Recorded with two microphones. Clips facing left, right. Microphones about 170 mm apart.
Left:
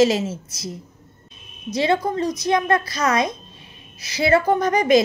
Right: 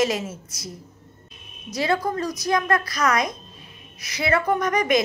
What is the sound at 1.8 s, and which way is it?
A woman's voice, 25° left (ahead or behind).